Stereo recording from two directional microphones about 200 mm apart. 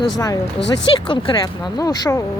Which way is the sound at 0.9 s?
25° left (ahead or behind).